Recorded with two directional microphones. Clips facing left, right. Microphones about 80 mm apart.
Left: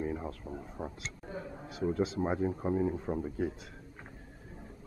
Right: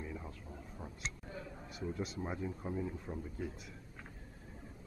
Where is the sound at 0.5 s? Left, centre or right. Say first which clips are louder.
Left 9 dB; left.